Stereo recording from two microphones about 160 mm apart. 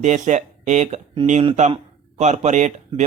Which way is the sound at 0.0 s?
45° right (ahead or behind).